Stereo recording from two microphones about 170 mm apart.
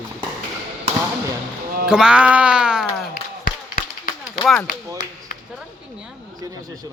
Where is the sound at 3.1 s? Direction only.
60° left (ahead or behind).